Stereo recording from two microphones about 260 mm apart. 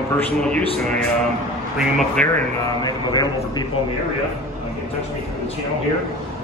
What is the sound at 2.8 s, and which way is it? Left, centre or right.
Speech, centre.